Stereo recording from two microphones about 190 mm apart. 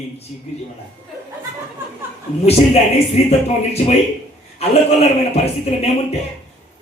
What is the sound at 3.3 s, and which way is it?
A man's voice, 35° left (ahead or behind).